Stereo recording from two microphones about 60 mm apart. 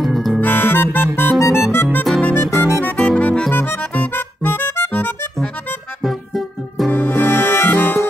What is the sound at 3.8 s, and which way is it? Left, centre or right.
Music, left.